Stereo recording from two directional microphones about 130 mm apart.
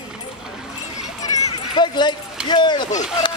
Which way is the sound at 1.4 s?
35° left (ahead or behind).